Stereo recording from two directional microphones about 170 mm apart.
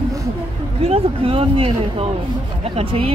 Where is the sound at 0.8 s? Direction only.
35° right (ahead or behind).